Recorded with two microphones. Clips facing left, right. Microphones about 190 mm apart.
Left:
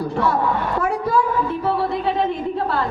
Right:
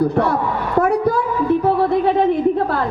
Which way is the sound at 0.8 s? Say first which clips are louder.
Right 7 dB; 60° right (ahead or behind).